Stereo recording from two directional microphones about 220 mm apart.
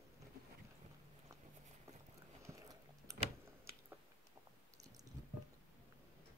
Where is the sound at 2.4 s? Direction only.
15° right (ahead or behind).